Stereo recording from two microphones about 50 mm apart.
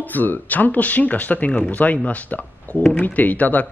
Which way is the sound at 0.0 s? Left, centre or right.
Left.